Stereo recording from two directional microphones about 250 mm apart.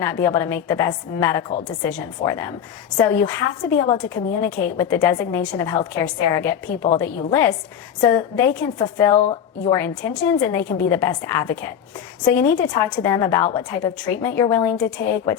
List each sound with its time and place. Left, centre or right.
0.0 s a woman's voice: centre
10.4 s a woman's voice: centre